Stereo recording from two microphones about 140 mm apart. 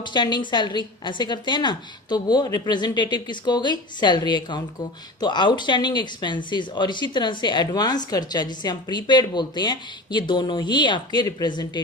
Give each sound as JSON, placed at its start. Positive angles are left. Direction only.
{"t": 0.0, "sound": "speech", "side_deg": 30}